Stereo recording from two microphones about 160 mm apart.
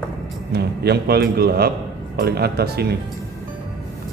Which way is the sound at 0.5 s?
85° right.